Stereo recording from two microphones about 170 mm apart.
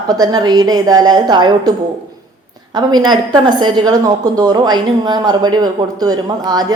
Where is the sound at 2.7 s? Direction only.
25° right (ahead or behind).